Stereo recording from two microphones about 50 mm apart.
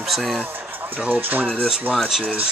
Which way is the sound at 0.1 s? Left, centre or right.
Centre.